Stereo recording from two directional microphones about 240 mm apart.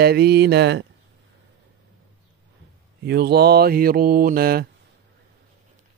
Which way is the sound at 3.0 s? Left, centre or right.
Right.